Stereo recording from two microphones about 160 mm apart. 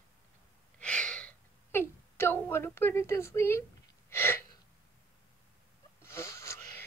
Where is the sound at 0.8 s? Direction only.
5° left (ahead or behind).